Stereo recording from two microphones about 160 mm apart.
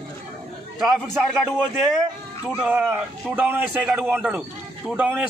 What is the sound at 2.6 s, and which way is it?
A man's voice, 5° right (ahead or behind).